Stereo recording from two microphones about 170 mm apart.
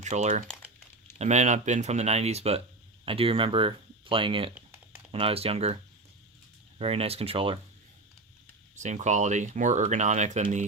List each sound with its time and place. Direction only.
0.0 s speech: 40° right (ahead or behind)
6.7 s speech: 35° right (ahead or behind)
8.7 s speech: 45° right (ahead or behind)